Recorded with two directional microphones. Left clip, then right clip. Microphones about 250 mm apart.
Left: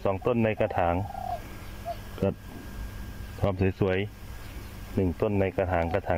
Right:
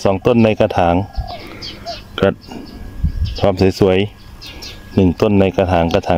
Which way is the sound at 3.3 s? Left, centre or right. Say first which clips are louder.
Right 14 dB; centre.